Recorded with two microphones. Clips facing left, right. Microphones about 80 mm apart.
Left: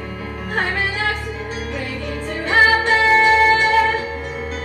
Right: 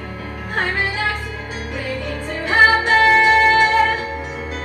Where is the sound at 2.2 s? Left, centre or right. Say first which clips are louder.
Right 1 dB; centre.